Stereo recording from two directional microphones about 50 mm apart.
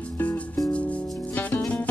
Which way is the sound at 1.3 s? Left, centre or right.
Left.